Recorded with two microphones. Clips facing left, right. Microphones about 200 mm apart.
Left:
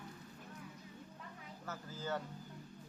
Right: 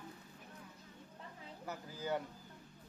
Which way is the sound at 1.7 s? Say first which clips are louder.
Right 2 dB; 15° right (ahead or behind).